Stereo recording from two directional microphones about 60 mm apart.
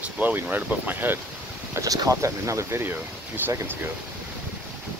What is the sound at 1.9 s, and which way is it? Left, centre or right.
Speech, right.